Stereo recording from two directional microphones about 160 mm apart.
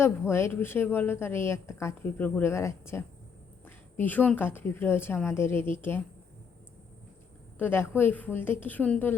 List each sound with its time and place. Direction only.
0.0 s a woman's voice: 15° left (ahead or behind)
7.6 s a woman's voice: 15° left (ahead or behind)